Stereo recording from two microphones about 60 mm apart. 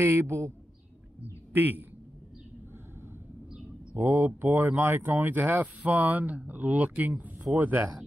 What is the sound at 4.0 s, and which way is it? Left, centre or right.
Speech, right.